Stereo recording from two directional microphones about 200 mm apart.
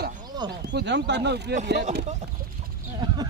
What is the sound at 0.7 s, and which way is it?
Speech, 60° right (ahead or behind).